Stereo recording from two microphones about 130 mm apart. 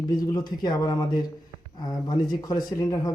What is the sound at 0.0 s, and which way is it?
Speech, 30° left (ahead or behind).